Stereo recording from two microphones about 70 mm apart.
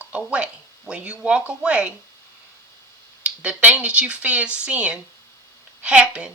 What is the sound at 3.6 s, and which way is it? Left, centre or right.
Speech, right.